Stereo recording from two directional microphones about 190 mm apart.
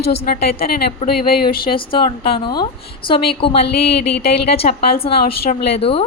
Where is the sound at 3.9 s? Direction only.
60° left (ahead or behind).